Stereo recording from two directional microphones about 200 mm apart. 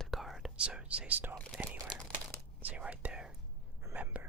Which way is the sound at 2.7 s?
5° right (ahead or behind).